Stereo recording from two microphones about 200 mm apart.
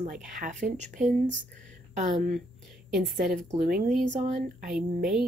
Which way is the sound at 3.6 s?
45° right (ahead or behind).